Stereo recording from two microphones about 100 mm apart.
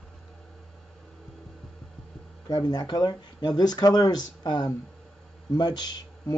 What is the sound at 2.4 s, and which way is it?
Speech, 45° left (ahead or behind).